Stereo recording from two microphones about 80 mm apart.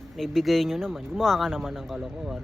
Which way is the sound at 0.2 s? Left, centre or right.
Centre.